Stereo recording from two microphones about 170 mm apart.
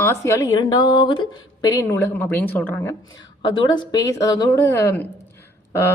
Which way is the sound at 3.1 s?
25° left (ahead or behind).